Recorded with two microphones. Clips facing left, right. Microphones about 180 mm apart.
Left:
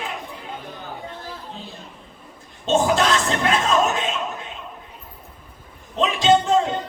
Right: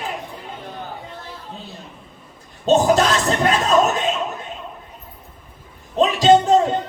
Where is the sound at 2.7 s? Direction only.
40° right (ahead or behind).